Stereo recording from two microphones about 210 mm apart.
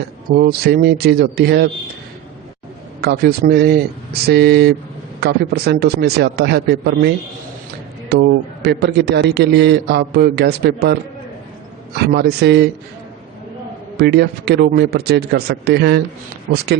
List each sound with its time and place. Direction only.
0.3 s a man's voice: 45° right (ahead or behind)
3.0 s a man's voice: 50° right (ahead or behind)
8.1 s a man's voice: 50° right (ahead or behind)
11.9 s a man's voice: 50° right (ahead or behind)
13.9 s a man's voice: 50° right (ahead or behind)